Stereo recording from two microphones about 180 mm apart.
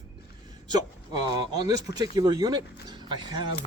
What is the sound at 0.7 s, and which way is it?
Speech, 25° right (ahead or behind).